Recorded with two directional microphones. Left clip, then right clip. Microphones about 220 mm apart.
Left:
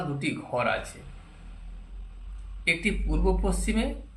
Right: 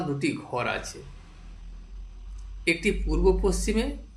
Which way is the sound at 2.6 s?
30° right (ahead or behind).